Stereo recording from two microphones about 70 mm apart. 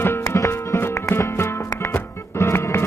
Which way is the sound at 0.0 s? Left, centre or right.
Left.